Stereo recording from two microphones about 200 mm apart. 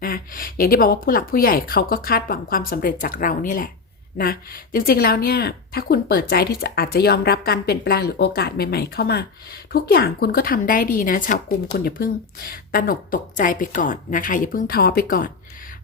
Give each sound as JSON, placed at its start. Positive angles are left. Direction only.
{"t": 0.0, "sound": "a woman's voice", "side_deg": 45}